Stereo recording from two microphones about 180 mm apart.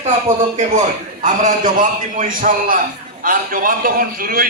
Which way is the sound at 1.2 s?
45° right (ahead or behind).